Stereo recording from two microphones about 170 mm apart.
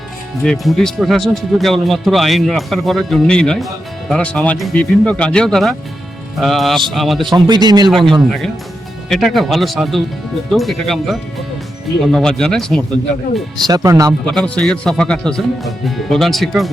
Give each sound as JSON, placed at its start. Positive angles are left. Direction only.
{"t": 0.4, "sound": "speech", "side_deg": 0}
{"t": 7.2, "sound": "speech", "side_deg": -25}
{"t": 7.9, "sound": "speech", "side_deg": 0}
{"t": 13.7, "sound": "speech", "side_deg": -20}
{"t": 14.3, "sound": "speech", "side_deg": 5}